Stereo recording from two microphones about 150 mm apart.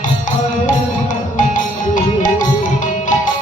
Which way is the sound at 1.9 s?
60° left (ahead or behind).